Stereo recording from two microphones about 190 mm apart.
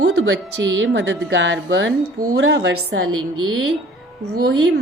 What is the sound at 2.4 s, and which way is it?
Speech, 70° right (ahead or behind).